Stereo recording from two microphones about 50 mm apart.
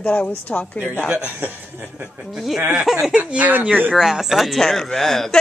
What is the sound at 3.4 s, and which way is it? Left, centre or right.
Speech, right.